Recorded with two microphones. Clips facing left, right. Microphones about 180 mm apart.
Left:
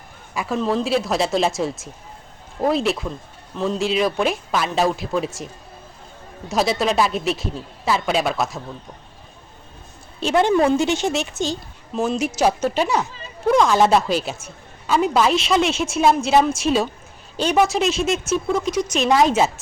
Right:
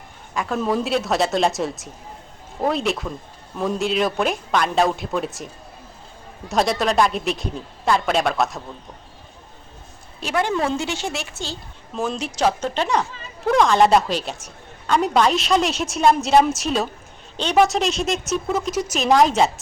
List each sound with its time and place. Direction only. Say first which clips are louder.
0.3 s a man's voice: even; 5° left (ahead or behind)
0.6 s a woman's voice: left 2 dB; 5° right (ahead or behind)
6.5 s a woman's voice: even; centre (ahead or behind)
10.2 s a woman's voice: left 5 dB; 25° left (ahead or behind)
11.9 s a woman's voice: left 3 dB; 5° left (ahead or behind)